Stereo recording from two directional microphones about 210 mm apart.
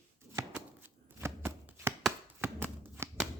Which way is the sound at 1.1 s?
10° right (ahead or behind).